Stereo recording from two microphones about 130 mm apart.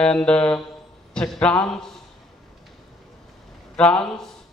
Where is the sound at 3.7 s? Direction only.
10° left (ahead or behind).